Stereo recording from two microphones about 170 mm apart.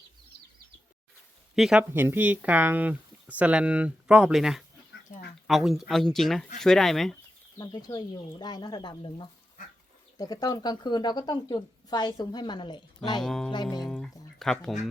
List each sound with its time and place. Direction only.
1.5 s speech: centre (ahead or behind)
1.9 s speech: 10° right (ahead or behind)
7.6 s a woman's voice: 25° left (ahead or behind)
13.2 s speech: centre (ahead or behind)
13.5 s a woman's voice: 25° left (ahead or behind)
13.8 s music: centre (ahead or behind)